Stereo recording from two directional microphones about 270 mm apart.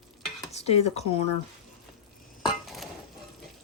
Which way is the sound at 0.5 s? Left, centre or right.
Left.